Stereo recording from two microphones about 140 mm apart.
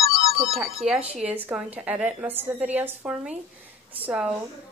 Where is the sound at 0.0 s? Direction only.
45° right (ahead or behind).